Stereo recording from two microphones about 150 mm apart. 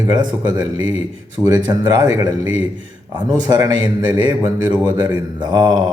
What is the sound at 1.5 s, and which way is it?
Speech, 25° right (ahead or behind).